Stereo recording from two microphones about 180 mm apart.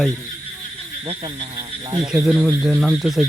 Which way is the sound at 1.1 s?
30° right (ahead or behind).